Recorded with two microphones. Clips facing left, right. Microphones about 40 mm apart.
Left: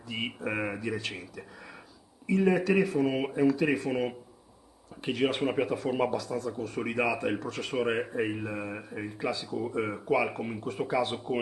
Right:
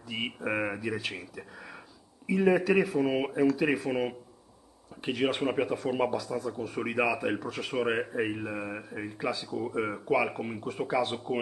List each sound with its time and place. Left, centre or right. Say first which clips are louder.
0.1 s speech: right 1 dB; centre